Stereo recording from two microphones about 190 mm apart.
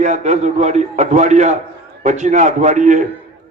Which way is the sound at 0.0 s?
40° right (ahead or behind).